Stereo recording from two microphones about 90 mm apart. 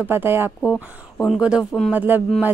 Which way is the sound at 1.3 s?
5° right (ahead or behind).